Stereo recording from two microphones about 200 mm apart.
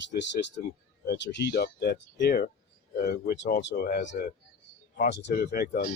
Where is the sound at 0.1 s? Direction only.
60° left (ahead or behind).